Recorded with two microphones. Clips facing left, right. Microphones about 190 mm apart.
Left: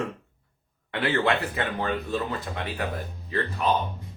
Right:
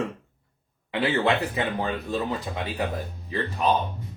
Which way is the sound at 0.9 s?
20° right (ahead or behind).